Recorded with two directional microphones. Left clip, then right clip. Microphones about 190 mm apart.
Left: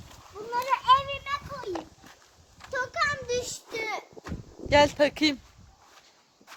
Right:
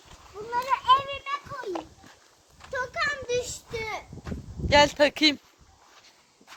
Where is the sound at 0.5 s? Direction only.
25° left (ahead or behind).